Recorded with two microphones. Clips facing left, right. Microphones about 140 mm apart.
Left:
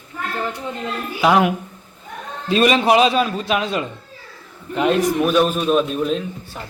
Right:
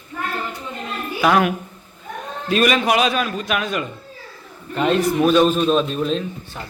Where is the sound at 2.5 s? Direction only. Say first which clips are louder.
Left 3 dB; 30° left (ahead or behind).